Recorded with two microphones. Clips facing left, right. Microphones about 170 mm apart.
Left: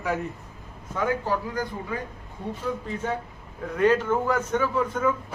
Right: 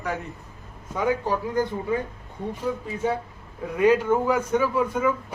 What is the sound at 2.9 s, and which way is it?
Speech, 10° right (ahead or behind).